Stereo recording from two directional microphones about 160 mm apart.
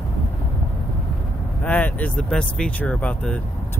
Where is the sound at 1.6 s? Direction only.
10° left (ahead or behind).